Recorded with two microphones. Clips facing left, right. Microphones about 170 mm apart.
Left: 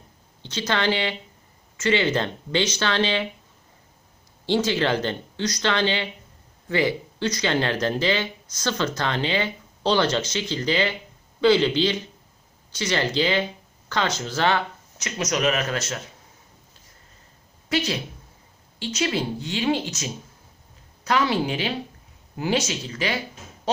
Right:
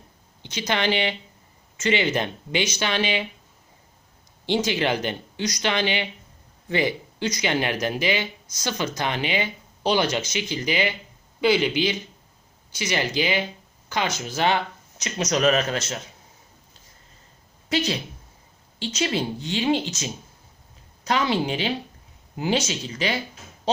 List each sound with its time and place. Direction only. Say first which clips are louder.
0.4 s speech: left 1 dB; 15° right (ahead or behind)
4.4 s speech: left 1 dB; 15° right (ahead or behind)
15.3 s speech: right 3 dB; 35° right (ahead or behind)
15.7 s a woman's voice: even; 20° right (ahead or behind)
18.8 s a woman's voice: even; 20° right (ahead or behind)